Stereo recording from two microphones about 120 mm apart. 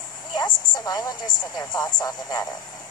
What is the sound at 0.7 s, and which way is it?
A woman's voice, 35° left (ahead or behind).